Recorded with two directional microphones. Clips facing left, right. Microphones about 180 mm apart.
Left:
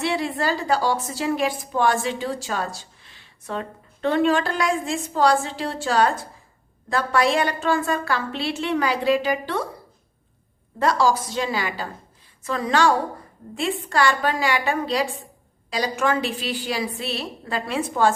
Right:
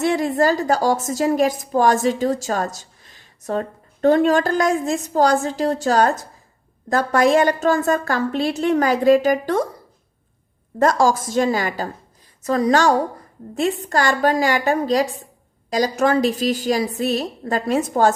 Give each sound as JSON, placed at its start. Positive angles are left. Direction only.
{"t": 0.0, "sound": "a woman's voice", "side_deg": -45}
{"t": 10.8, "sound": "a woman's voice", "side_deg": -45}